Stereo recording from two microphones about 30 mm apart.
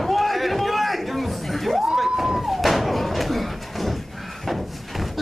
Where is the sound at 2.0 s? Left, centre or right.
Centre.